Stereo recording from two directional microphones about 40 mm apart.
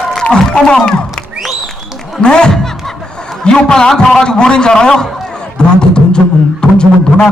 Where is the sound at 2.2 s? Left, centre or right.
Left.